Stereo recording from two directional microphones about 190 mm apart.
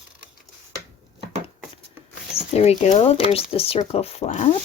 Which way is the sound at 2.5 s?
35° left (ahead or behind).